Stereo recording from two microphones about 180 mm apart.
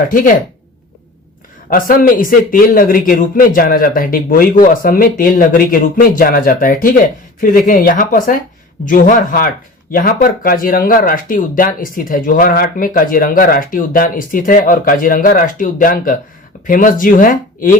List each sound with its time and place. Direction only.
0.1 s speech: 50° left (ahead or behind)
1.7 s speech: 50° left (ahead or behind)